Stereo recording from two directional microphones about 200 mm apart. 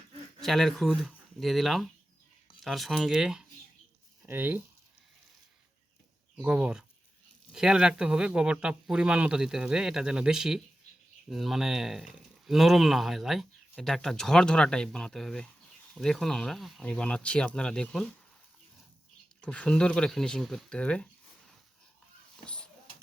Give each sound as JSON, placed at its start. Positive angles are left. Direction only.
{"t": 0.4, "sound": "speech", "side_deg": 0}
{"t": 6.3, "sound": "speech", "side_deg": -5}
{"t": 19.4, "sound": "speech", "side_deg": 5}
{"t": 22.4, "sound": "a sound", "side_deg": 5}